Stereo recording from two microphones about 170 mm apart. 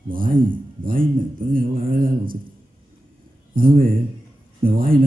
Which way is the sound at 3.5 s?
55° right (ahead or behind).